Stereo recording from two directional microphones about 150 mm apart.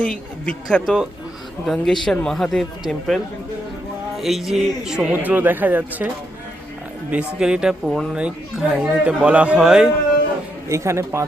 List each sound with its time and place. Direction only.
0.0 s speech: 5° left (ahead or behind)
4.2 s speech: centre (ahead or behind)
7.1 s speech: 10° right (ahead or behind)
10.7 s speech: 20° right (ahead or behind)